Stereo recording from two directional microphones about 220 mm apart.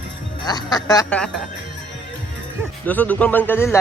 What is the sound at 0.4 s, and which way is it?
Speech, 20° left (ahead or behind).